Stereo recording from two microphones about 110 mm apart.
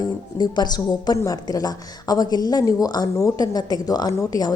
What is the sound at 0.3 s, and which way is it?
Speech, 40° left (ahead or behind).